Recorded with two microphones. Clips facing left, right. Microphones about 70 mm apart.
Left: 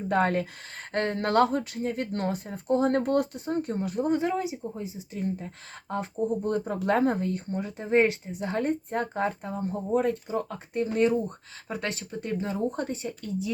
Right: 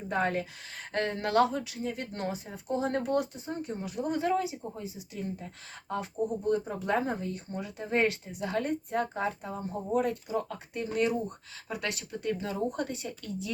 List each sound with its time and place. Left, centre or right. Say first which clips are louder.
0.1 s speech: left 5 dB; left
4.1 s speech: right 1 dB; left
6.2 s speech: left 2 dB; left
9.9 s speech: left 3 dB; left